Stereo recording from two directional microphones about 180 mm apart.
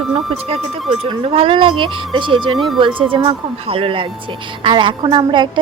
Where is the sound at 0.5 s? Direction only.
35° right (ahead or behind).